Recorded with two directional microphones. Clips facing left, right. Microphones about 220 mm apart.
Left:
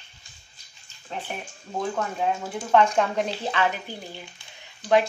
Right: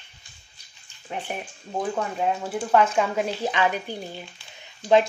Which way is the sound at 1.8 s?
5° right (ahead or behind).